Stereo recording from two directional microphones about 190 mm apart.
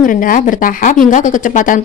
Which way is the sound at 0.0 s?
45° left (ahead or behind).